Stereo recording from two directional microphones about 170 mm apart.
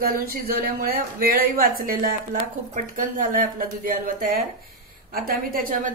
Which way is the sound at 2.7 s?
50° right (ahead or behind).